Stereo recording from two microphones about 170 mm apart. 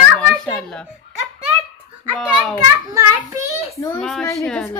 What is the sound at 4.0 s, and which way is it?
Speech, 5° left (ahead or behind).